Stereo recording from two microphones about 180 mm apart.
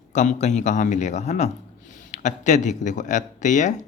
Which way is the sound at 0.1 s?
40° left (ahead or behind).